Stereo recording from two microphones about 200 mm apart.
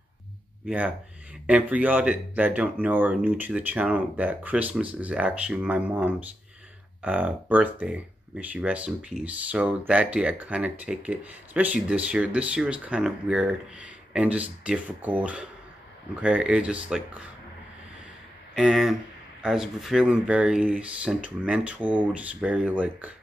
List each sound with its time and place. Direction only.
0.7 s speech: 5° right (ahead or behind)
18.5 s speech: centre (ahead or behind)